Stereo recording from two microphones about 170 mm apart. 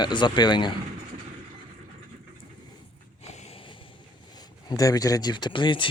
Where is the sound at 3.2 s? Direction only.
40° left (ahead or behind).